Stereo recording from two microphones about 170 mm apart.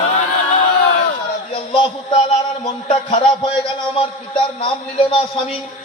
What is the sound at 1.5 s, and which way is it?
A man's voice, 30° left (ahead or behind).